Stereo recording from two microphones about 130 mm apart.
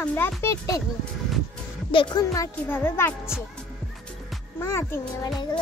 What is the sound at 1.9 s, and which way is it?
Speech, 40° left (ahead or behind).